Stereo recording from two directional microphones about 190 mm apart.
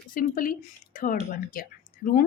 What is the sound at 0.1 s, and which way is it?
A woman's voice, 45° left (ahead or behind).